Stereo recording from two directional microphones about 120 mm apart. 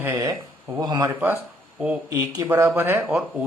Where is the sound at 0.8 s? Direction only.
30° right (ahead or behind); by 3.1 s 15° right (ahead or behind).